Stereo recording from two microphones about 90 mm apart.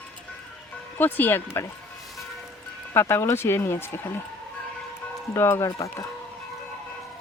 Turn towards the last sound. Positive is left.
turn(degrees=35)  # may be behind; listen again after turning